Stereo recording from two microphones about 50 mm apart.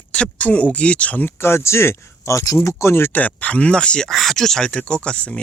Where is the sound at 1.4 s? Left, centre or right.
Left.